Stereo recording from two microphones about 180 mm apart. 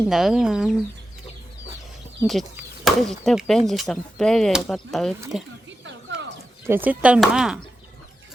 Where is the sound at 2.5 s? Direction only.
Centre (ahead or behind).